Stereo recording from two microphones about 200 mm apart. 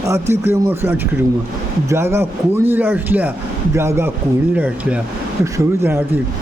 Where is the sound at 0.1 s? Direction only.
15° right (ahead or behind).